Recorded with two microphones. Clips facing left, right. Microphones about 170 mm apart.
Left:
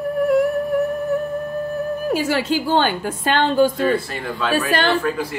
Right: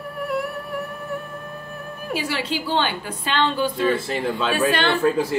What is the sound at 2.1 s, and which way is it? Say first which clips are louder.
A woman's voice: left 4 dB; 45° left (ahead or behind).